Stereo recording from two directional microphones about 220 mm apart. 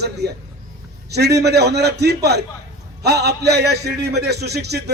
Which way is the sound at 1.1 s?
50° right (ahead or behind).